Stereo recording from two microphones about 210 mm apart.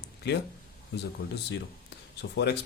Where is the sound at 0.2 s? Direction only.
55° left (ahead or behind).